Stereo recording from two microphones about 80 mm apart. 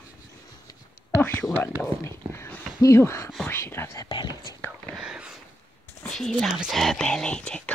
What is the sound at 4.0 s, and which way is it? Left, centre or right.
Speech, left.